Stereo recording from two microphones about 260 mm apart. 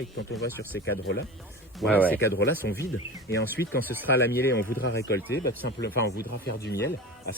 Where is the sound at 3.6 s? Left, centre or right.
Left.